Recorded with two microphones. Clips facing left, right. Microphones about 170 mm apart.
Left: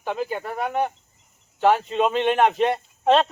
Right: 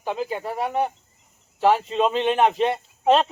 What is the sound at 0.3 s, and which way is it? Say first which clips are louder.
Speech: right 1 dB; 5° right (ahead or behind).